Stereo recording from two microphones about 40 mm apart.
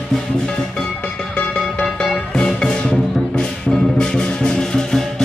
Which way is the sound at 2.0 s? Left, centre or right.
Centre.